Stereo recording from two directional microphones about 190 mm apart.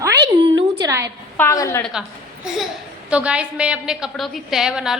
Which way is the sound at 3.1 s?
5° right (ahead or behind).